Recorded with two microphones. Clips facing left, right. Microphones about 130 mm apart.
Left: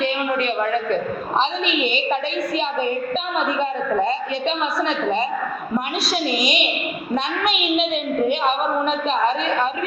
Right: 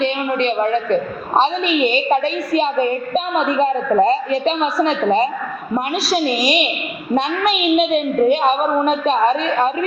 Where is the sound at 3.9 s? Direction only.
40° right (ahead or behind).